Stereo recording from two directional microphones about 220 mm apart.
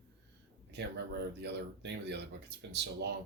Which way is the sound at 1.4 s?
50° right (ahead or behind).